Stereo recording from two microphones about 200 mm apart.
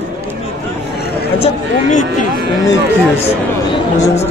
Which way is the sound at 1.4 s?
35° left (ahead or behind).